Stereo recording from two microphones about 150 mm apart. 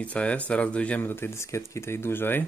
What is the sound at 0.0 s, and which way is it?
Speech, 10° left (ahead or behind).